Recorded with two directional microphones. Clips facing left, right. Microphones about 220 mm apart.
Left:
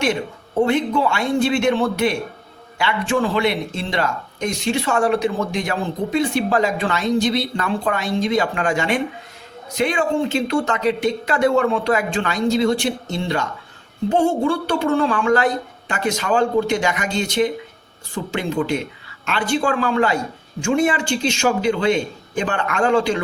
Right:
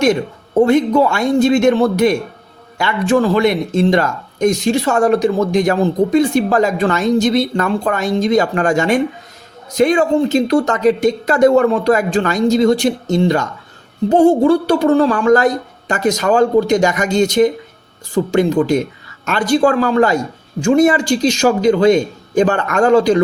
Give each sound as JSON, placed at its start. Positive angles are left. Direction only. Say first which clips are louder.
{"t": 0.6, "sound": "a man's voice", "louder": "right 6 dB", "side_deg": -40}